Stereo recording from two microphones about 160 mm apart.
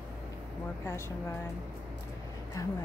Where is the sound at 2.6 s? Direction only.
20° left (ahead or behind).